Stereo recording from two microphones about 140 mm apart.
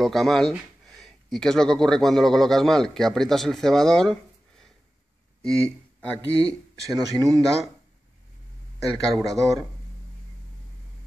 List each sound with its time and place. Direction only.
0.0 s speech: centre (ahead or behind)
6.9 s speech: 25° right (ahead or behind)
9.0 s speech: centre (ahead or behind)